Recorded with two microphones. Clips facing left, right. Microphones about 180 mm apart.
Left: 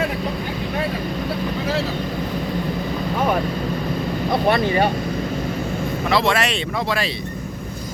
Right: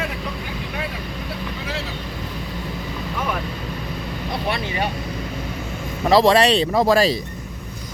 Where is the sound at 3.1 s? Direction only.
40° left (ahead or behind).